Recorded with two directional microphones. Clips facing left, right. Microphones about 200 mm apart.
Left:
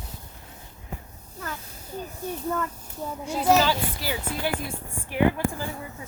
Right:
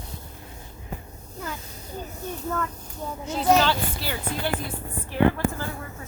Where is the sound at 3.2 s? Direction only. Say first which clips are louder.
Even; 10° left (ahead or behind).